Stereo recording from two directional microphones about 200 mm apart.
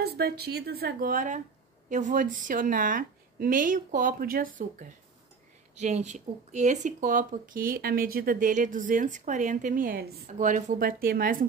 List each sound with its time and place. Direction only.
0.0 s a woman's voice: 50° right (ahead or behind)